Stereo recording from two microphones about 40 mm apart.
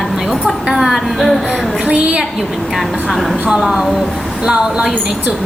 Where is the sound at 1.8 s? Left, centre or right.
Right.